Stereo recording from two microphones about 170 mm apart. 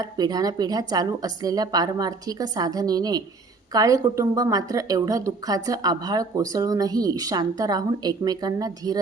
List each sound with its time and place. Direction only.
0.0 s a woman's voice: 20° right (ahead or behind)